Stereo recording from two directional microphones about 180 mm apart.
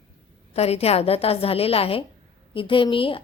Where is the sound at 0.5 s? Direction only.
35° left (ahead or behind).